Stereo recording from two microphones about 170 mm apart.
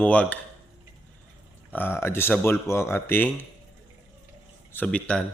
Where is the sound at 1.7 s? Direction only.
10° left (ahead or behind).